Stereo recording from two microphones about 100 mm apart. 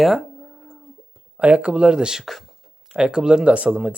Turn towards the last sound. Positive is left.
turn(degrees=-15)  # may be behind; listen again after turning